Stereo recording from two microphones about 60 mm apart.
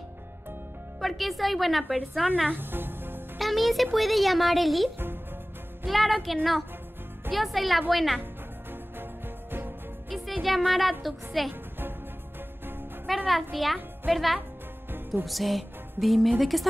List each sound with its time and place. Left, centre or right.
1.0 s a woman's voice: centre
2.5 s music: right
3.3 s speech: centre
4.9 s music: right
5.9 s a woman's voice: centre
7.3 s a woman's voice: centre
9.5 s music: right
10.0 s music: centre
10.4 s a woman's voice: centre
13.3 s a woman's voice: centre